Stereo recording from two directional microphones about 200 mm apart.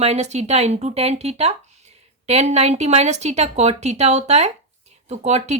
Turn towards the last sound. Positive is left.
turn(degrees=-35)  # may be behind; listen again after turning